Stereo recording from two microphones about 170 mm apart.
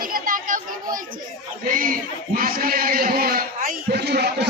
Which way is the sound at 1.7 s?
55° right (ahead or behind).